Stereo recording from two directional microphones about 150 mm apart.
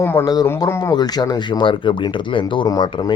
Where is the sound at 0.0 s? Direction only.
15° left (ahead or behind).